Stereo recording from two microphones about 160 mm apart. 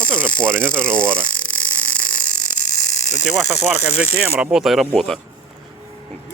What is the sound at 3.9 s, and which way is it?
Speech, 5° right (ahead or behind).